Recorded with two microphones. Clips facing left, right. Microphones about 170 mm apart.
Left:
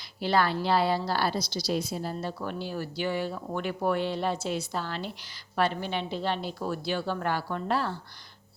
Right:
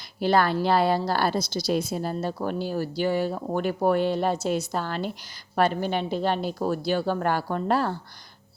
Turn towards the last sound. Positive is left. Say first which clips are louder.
# right 5 dB
turn(degrees=-45)  # may be behind; listen again after turning